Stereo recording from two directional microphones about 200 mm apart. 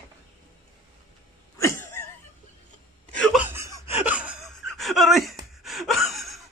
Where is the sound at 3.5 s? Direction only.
15° right (ahead or behind).